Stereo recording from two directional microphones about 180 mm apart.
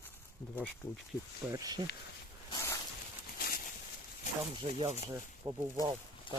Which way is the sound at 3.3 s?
55° left (ahead or behind).